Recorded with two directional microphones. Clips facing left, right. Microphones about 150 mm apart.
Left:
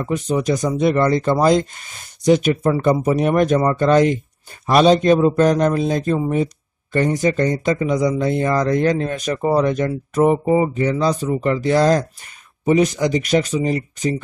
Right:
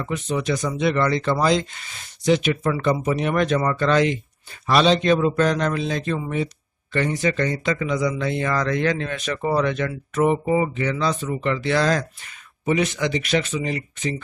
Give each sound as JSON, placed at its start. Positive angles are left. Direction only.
{"t": 0.0, "sound": "speech", "side_deg": 40}